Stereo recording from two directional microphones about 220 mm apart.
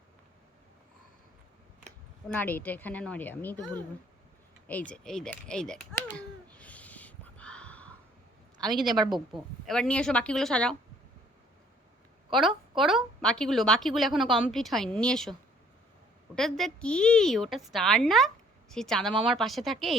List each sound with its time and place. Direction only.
2.3 s a woman's voice: 10° left (ahead or behind)
4.7 s a sound: 5° left (ahead or behind)
8.7 s a woman's voice: centre (ahead or behind)
9.0 s a woman's voice: 20° right (ahead or behind)
9.3 s a woman's voice: centre (ahead or behind)
12.3 s a woman's voice: centre (ahead or behind)